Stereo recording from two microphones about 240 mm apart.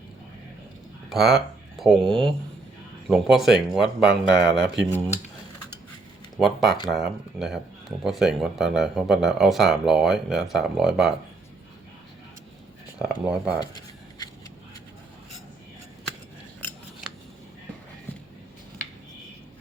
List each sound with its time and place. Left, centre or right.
1.1 s speech: centre
6.3 s speech: centre
13.0 s speech: centre
13.6 s a sound: centre